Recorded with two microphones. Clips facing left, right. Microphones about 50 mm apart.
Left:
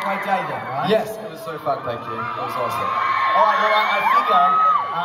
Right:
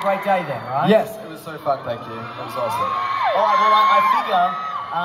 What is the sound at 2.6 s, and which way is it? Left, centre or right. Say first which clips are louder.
Speech: right 2 dB; centre.